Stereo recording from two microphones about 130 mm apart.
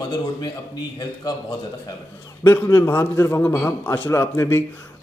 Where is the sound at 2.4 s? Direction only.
20° left (ahead or behind).